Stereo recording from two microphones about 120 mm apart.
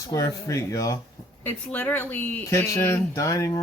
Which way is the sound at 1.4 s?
15° left (ahead or behind).